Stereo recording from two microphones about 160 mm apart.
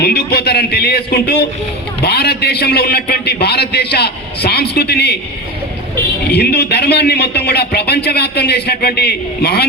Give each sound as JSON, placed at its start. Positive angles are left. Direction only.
{"t": 0.0, "sound": "a man's voice", "side_deg": 85}
{"t": 6.3, "sound": "speech", "side_deg": 90}